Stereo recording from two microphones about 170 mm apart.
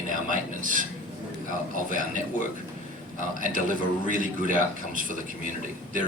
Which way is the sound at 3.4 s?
50° right (ahead or behind).